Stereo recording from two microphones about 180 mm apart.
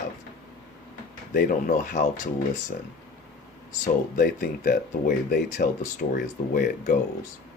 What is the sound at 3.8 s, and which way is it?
Speech, 50° left (ahead or behind).